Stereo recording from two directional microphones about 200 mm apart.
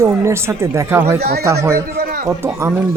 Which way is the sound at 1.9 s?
50° right (ahead or behind).